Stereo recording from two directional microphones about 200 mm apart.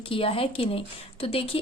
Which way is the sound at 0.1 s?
30° left (ahead or behind).